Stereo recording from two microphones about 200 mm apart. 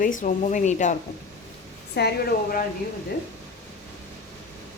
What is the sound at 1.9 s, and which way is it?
Speech, 55° left (ahead or behind).